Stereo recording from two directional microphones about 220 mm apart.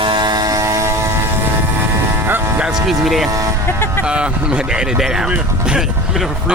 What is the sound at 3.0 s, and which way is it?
Speech, centre (ahead or behind).